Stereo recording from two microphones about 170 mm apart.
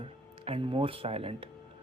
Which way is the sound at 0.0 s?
35° right (ahead or behind).